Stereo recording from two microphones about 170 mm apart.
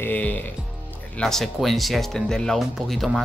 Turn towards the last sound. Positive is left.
turn(degrees=0)  # may be behind; listen again after turning